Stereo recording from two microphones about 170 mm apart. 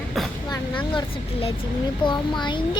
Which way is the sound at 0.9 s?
30° left (ahead or behind).